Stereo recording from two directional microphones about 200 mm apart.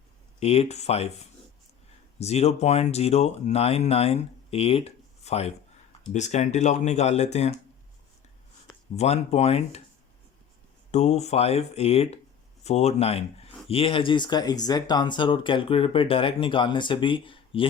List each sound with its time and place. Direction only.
0.3 s speech: 30° left (ahead or behind)
9.0 s speech: 35° left (ahead or behind)
10.9 s speech: 35° left (ahead or behind)